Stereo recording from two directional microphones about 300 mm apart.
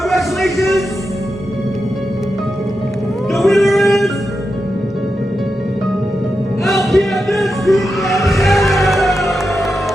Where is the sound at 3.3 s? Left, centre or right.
Centre.